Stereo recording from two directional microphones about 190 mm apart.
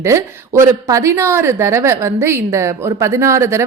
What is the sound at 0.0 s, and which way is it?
A woman's voice, 15° right (ahead or behind).